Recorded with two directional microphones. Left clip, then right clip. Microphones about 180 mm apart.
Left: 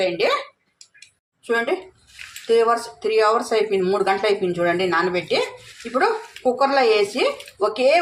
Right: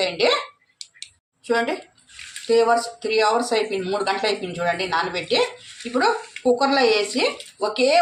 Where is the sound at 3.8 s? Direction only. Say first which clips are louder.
Left 3 dB; 15° left (ahead or behind).